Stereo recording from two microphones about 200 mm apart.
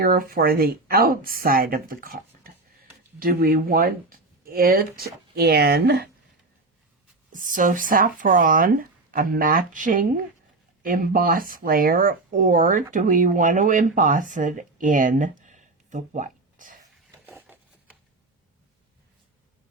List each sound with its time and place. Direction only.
0.0 s speech: 45° right (ahead or behind)
7.3 s speech: 40° right (ahead or behind)
17.2 s a sound: 10° right (ahead or behind)